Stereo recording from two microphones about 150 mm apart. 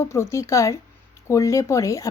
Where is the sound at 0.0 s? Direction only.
20° left (ahead or behind).